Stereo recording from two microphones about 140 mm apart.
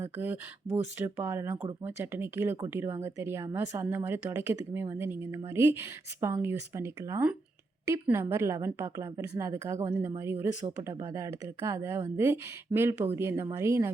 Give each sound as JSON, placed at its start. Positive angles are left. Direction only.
{"t": 0.0, "sound": "a woman's voice", "side_deg": -15}